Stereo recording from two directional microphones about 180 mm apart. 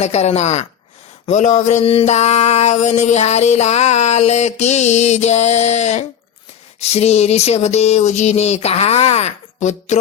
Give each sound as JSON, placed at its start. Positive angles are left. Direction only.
{"t": 0.0, "sound": "mantra", "side_deg": 35}